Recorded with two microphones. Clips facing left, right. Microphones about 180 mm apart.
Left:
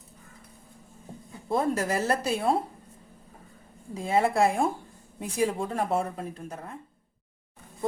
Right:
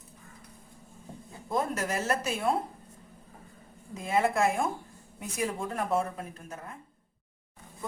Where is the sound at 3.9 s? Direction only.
30° left (ahead or behind).